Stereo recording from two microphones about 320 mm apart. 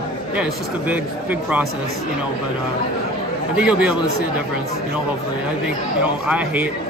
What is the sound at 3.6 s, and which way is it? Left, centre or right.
Speech, centre.